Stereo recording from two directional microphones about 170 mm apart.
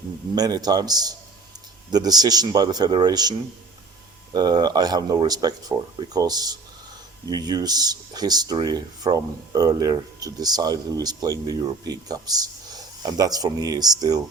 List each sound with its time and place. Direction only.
0.3 s speech: 25° right (ahead or behind)
4.4 s speech: 25° right (ahead or behind)